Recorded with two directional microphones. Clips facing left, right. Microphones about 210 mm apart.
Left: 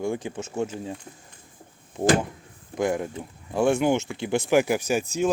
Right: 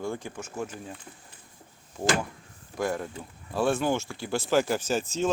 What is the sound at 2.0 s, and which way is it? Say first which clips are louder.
Speech: left 6 dB; 25° left (ahead or behind).